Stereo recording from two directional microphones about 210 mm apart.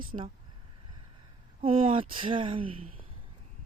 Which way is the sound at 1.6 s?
25° right (ahead or behind).